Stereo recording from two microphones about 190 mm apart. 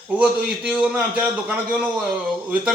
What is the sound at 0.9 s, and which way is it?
Speech, 5° right (ahead or behind).